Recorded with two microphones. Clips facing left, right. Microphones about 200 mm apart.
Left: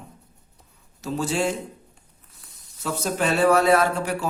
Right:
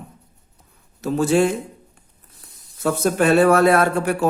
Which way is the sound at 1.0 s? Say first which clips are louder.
Right 7 dB; 55° right (ahead or behind).